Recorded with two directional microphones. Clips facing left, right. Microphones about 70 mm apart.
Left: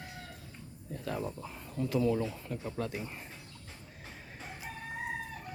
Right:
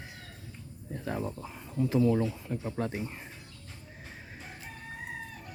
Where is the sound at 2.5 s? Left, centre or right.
Right.